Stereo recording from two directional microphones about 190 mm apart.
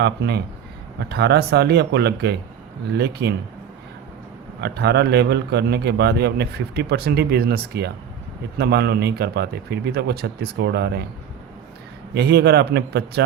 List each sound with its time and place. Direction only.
0.0 s a man's voice: 60° right (ahead or behind)
4.6 s a man's voice: 60° right (ahead or behind)
12.1 s a man's voice: 60° right (ahead or behind)